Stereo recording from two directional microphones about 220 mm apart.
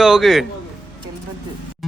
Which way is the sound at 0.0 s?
Centre (ahead or behind).